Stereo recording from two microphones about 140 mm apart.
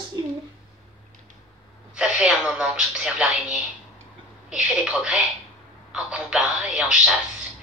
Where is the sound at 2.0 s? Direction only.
5° right (ahead or behind).